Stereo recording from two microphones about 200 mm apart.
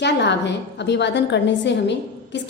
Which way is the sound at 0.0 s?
60° left (ahead or behind).